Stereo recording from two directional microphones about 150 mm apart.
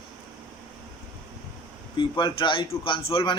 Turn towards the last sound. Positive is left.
turn(degrees=35)  # may be behind; listen again after turning